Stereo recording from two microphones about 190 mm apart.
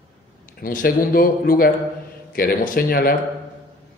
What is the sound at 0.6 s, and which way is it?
A man's voice, 50° left (ahead or behind).